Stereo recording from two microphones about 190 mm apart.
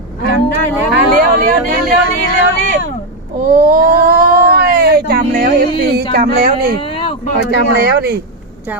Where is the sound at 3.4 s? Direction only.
50° right (ahead or behind).